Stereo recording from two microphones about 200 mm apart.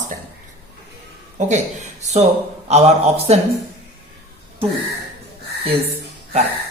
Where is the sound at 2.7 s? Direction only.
30° right (ahead or behind).